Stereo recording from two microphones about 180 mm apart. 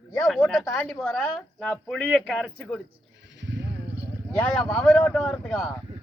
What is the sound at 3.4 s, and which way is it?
Sheep, 80° right.